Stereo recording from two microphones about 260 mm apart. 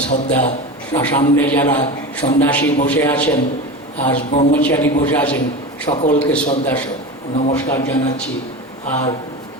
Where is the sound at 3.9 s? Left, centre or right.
Left.